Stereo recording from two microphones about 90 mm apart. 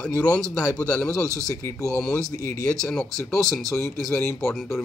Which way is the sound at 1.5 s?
30° left (ahead or behind).